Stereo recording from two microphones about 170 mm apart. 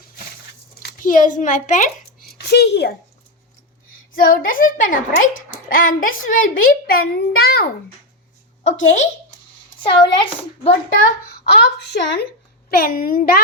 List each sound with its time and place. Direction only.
0.8 s a child's voice: 60° left (ahead or behind)
2.4 s a child's voice: 75° left (ahead or behind)
4.1 s a woman's voice: 55° left (ahead or behind)
8.6 s speech: 45° left (ahead or behind)
9.8 s speech: 30° left (ahead or behind)
11.8 s speech: 80° left
12.7 s a woman's voice: 55° left (ahead or behind)